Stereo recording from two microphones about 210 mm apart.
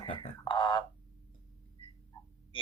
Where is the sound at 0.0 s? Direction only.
25° left (ahead or behind).